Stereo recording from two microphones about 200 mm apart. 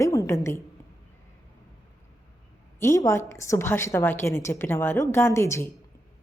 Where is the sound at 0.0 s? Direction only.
15° left (ahead or behind).